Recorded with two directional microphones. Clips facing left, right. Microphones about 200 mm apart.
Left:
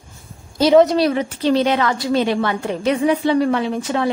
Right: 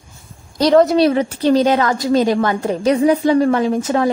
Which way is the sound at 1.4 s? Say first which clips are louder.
Right 3 dB; 40° right (ahead or behind).